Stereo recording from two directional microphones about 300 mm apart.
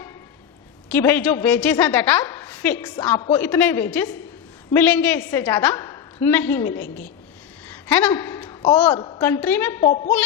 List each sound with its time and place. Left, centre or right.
0.9 s a woman's voice: centre
6.7 s a woman's voice: left
7.7 s a woman's voice: centre
9.8 s a woman's voice: left